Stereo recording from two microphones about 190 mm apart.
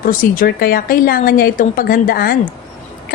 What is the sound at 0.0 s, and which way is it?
A woman's voice, 50° left (ahead or behind).